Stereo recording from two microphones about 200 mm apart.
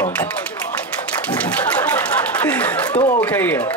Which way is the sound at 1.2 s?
5° left (ahead or behind).